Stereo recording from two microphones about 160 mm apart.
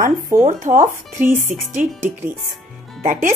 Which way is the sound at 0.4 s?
50° right (ahead or behind).